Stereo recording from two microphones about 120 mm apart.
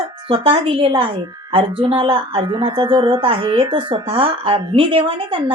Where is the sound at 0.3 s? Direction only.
50° right (ahead or behind).